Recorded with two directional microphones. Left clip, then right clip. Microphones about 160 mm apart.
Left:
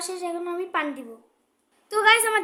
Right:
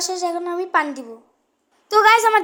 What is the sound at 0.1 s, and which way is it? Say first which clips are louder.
A child's voice: right 7 dB; 20° right (ahead or behind).